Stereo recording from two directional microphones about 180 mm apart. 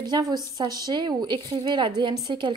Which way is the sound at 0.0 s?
25° right (ahead or behind).